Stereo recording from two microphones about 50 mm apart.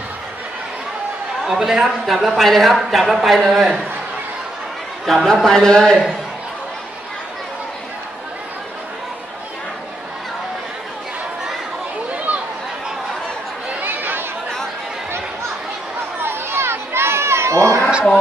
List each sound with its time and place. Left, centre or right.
1.4 s a man's voice: centre
2.3 s a man's voice: centre
5.0 s a man's voice: centre
12.3 s chatter: right
13.7 s chatter: right
16.2 s crowd: right